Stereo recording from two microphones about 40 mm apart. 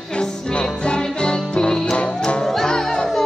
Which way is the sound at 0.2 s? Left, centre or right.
Left.